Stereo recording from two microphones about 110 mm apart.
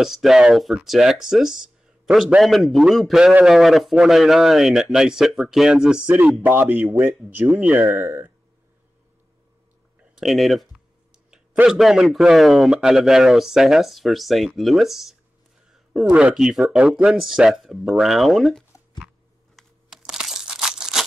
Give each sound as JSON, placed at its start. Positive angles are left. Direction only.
{"t": 0.0, "sound": "a man's voice", "side_deg": -5}
{"t": 7.4, "sound": "a man's voice", "side_deg": 0}
{"t": 7.7, "sound": "speech", "side_deg": -15}
{"t": 10.1, "sound": "a man's voice", "side_deg": 0}
{"t": 15.7, "sound": "a sound", "side_deg": 0}
{"t": 16.1, "sound": "a man's voice", "side_deg": -10}
{"t": 19.5, "sound": "a sound", "side_deg": -5}